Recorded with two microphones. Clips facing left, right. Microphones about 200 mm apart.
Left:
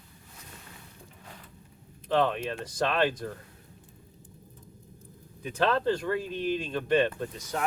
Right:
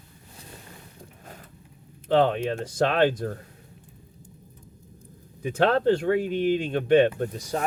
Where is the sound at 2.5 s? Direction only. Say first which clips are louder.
Right 5 dB; 55° right (ahead or behind).